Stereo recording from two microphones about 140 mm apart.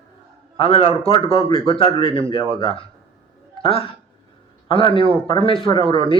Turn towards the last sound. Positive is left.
turn(degrees=40)  # may be behind; listen again after turning